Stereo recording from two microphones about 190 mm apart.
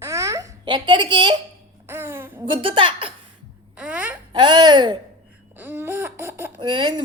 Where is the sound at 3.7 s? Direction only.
5° right (ahead or behind).